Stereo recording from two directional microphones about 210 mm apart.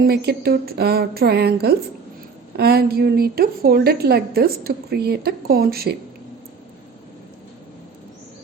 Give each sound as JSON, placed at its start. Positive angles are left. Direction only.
{"t": 0.0, "sound": "a woman's voice", "side_deg": -50}